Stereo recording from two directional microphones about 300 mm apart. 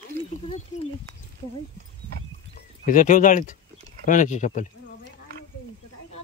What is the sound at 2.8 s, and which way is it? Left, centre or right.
Speech, left.